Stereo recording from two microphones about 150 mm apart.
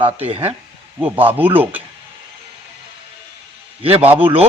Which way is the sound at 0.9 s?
10° right (ahead or behind).